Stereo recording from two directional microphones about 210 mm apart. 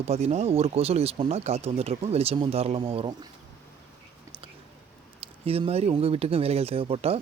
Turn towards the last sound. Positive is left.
turn(degrees=-30)  # may be behind; listen again after turning